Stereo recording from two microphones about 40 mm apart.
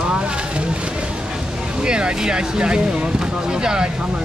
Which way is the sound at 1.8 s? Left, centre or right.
Right.